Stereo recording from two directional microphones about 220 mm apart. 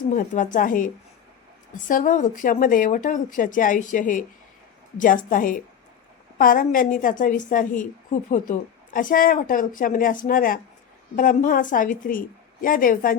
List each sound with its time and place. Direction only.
0.1 s speech: 35° left (ahead or behind)
1.9 s speech: 35° left (ahead or behind)